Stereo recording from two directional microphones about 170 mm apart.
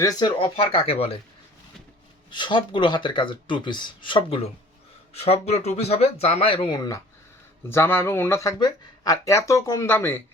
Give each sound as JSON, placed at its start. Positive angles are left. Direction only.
{"t": 0.0, "sound": "speech", "side_deg": 25}
{"t": 2.3, "sound": "speech", "side_deg": 25}